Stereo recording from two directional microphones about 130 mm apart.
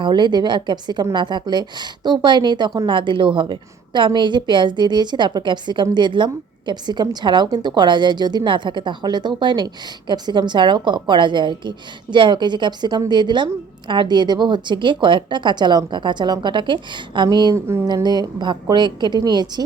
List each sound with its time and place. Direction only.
0.0 s speech: 35° right (ahead or behind)
17.5 s speech: 20° right (ahead or behind)
17.8 s speech: 35° right (ahead or behind)